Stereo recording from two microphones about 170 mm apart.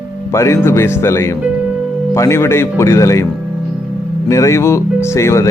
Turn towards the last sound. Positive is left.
turn(degrees=15)  # may be behind; listen again after turning